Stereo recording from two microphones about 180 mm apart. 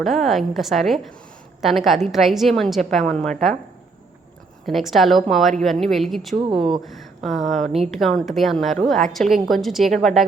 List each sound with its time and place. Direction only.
0.0 s a woman's voice: centre (ahead or behind)
4.6 s a woman's voice: centre (ahead or behind)
6.4 s speech: 30° right (ahead or behind)
6.8 s a woman's voice: centre (ahead or behind)